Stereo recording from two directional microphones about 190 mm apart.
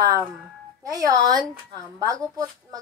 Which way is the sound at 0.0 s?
20° right (ahead or behind).